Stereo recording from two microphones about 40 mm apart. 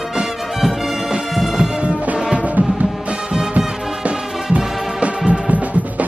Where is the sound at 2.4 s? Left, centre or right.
Right.